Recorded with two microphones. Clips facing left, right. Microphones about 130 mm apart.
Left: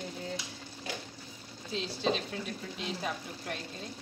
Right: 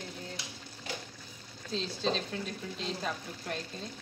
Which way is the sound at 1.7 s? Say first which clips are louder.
Left 1 dB; 5° left (ahead or behind).